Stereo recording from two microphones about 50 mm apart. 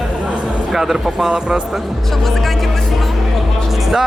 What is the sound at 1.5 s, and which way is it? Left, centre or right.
Speech, centre.